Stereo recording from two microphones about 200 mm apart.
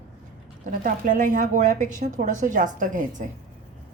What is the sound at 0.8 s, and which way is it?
Speech, 40° right (ahead or behind).